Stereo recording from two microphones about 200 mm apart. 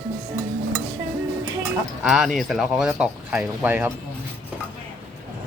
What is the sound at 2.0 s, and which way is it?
Speech, centre (ahead or behind).